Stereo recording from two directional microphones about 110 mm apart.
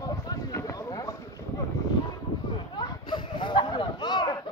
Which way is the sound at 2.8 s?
40° left (ahead or behind).